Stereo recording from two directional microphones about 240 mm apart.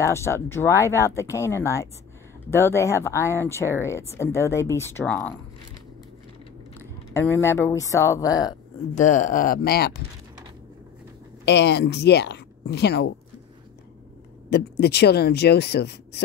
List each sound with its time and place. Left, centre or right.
0.0 s speech: centre
7.2 s speech: centre
8.9 s speech: left
11.4 s speech: left
14.5 s speech: left